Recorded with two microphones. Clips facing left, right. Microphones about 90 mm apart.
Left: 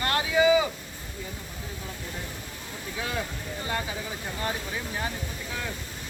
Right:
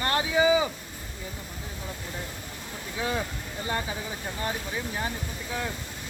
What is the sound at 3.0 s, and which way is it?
Speech, 20° right (ahead or behind).